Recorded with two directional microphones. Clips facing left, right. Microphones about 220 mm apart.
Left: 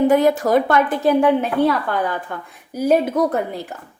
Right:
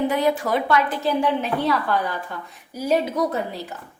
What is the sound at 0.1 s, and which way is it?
A woman's voice, 45° left (ahead or behind).